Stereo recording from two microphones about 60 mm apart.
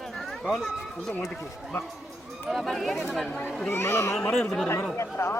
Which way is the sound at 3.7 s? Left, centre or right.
Left.